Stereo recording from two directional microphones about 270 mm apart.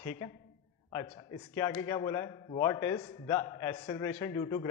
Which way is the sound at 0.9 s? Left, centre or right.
Centre.